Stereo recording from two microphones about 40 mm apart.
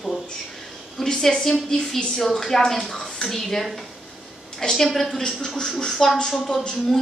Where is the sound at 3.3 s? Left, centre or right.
Centre.